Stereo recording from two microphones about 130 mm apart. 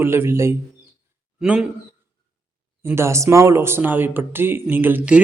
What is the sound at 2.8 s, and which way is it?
Speech, 20° right (ahead or behind).